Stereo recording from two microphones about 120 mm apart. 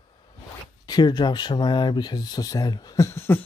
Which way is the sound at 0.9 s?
35° left (ahead or behind).